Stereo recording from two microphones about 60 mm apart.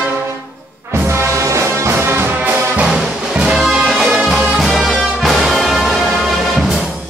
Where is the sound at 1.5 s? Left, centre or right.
Right.